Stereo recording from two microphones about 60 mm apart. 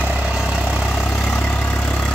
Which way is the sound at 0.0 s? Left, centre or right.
Right.